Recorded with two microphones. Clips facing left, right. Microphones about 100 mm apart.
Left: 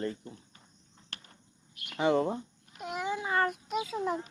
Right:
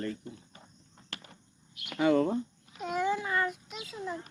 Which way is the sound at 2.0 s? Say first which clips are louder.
Right 2 dB; 15° left (ahead or behind).